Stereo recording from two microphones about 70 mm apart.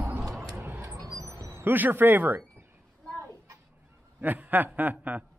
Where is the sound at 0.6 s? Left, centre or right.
Right.